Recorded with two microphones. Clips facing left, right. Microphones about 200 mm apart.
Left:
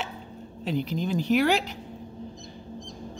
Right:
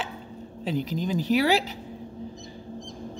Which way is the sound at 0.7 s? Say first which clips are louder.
Even; 45° right (ahead or behind).